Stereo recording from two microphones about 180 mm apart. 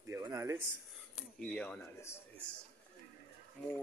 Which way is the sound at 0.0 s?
15° right (ahead or behind).